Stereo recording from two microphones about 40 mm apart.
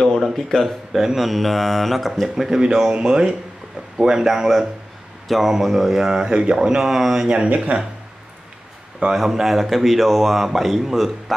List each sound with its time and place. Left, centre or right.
0.5 s speech: left
0.9 s a man's voice: centre
2.6 s speech: centre
7.4 s speech: right
9.1 s a man's voice: centre